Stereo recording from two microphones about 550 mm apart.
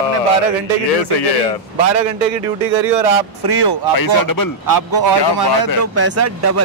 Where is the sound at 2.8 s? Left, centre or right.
Right.